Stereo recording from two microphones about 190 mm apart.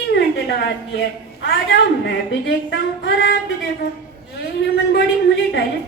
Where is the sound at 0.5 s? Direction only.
60° left (ahead or behind).